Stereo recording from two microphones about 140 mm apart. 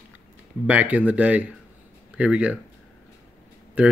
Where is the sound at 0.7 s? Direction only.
10° right (ahead or behind).